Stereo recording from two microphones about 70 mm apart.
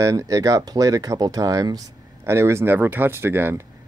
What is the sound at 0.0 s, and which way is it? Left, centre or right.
Speech, right.